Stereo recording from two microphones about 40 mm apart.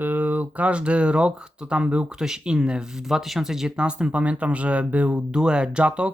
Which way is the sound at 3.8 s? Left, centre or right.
Right.